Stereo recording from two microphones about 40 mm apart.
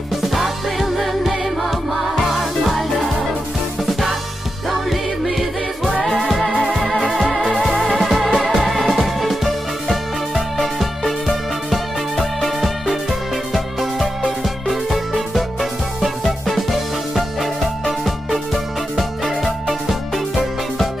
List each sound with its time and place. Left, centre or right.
0.3 s music: centre
4.6 s music: centre